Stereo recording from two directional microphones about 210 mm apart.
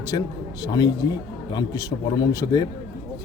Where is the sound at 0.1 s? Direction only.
20° left (ahead or behind).